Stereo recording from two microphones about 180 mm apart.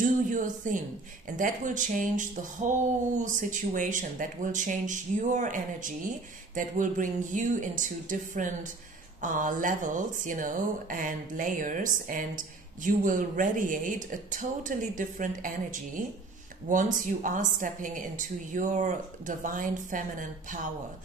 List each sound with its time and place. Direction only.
0.0 s speech: 45° right (ahead or behind)